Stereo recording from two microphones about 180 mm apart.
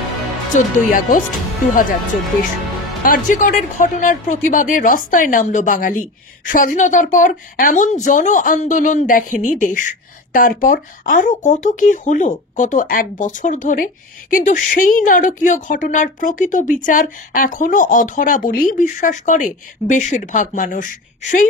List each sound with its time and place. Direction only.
0.5 s speech: 45° left (ahead or behind)
3.0 s speech: 50° left (ahead or behind)